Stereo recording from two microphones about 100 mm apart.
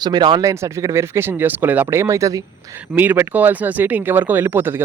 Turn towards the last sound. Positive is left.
turn(degrees=-20)  # may be behind; listen again after turning